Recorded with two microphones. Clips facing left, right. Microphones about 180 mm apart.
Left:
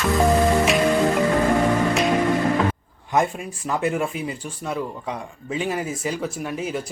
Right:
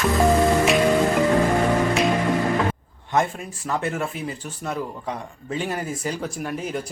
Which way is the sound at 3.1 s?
15° left (ahead or behind).